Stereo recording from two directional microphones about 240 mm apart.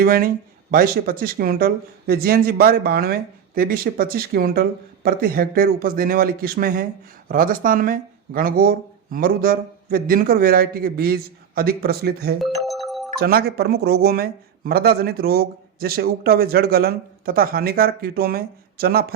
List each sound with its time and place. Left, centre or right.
0.0 s speech: right
12.4 s doorbell: centre
13.1 s speech: right